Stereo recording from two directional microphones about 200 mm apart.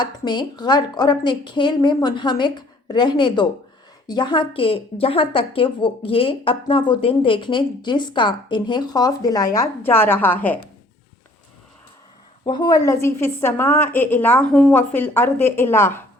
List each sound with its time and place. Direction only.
0.0 s a woman's voice: 20° left (ahead or behind)
12.5 s a woman's voice: 20° left (ahead or behind)